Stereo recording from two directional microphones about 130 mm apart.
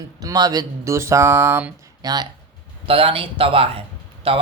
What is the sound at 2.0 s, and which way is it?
Speech, 30° right (ahead or behind).